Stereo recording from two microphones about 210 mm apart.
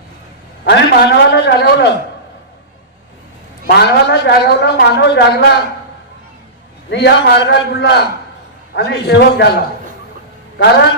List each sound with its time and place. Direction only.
0.6 s a man's voice: 50° left (ahead or behind)
3.7 s a man's voice: 50° left (ahead or behind)
6.9 s a man's voice: 50° left (ahead or behind)